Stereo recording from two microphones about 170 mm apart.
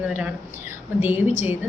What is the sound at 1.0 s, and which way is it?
Speech, 15° right (ahead or behind).